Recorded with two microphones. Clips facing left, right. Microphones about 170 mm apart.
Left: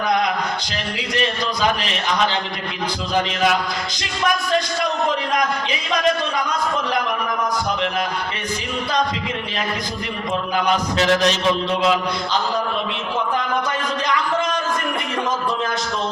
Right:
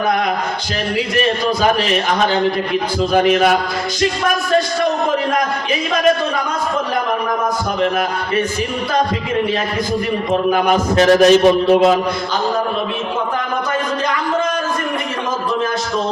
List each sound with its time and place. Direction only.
1.6 s a man's voice: 50° right (ahead or behind)
10.3 s a man's voice: 40° right (ahead or behind)